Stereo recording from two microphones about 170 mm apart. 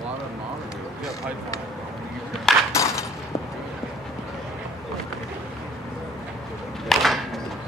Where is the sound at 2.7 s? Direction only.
15° left (ahead or behind).